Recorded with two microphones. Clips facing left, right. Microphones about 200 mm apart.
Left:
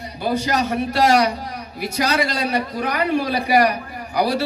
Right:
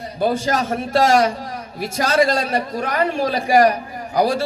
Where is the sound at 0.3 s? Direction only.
50° right (ahead or behind).